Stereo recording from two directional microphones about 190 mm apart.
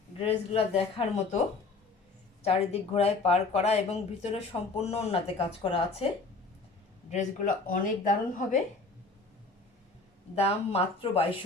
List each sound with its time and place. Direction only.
0.2 s speech: 30° left (ahead or behind)
2.4 s speech: 35° left (ahead or behind)
7.1 s speech: 40° left (ahead or behind)
10.3 s speech: 30° left (ahead or behind)